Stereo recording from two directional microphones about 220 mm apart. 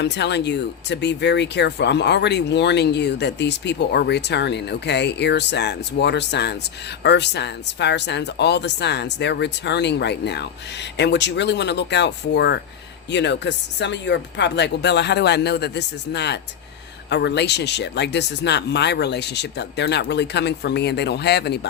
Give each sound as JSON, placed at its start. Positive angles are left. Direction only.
{"t": 0.0, "sound": "speech", "side_deg": 50}